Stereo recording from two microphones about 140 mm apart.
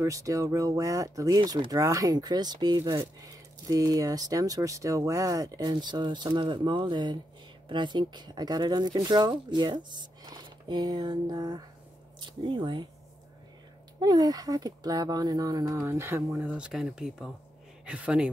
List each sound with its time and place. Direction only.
0.0 s speech: 25° right (ahead or behind)
13.9 s speech: 30° right (ahead or behind); by 18.3 s 10° right (ahead or behind)